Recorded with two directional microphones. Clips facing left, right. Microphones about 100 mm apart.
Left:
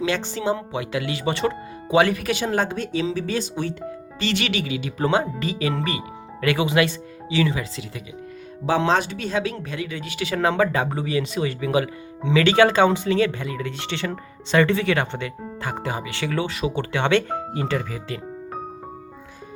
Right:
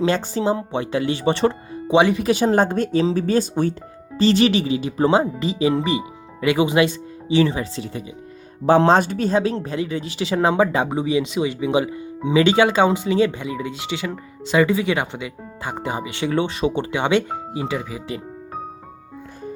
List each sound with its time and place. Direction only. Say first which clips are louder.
0.0 s speech: right 4 dB; 35° right (ahead or behind)
2.0 s speech: right 2 dB; 20° right (ahead or behind)
2.2 s speech: right 6 dB; 35° right (ahead or behind)
4.2 s speech: right 9 dB; 35° right (ahead or behind); by 15.3 s 10° right (ahead or behind)
15.6 s speech: right 2 dB; 20° right (ahead or behind)